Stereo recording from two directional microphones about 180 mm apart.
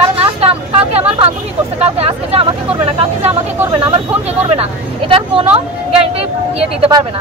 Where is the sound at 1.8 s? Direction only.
35° right (ahead or behind).